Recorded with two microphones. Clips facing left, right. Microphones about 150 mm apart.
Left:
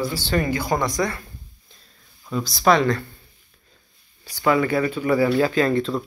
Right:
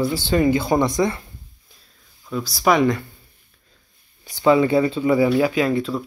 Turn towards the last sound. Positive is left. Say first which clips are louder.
# even
turn(degrees=-10)  # may be behind; listen again after turning